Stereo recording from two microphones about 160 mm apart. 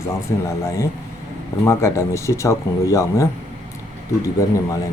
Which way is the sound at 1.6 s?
20° left (ahead or behind).